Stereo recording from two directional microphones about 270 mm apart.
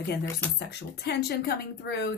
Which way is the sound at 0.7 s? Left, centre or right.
Left.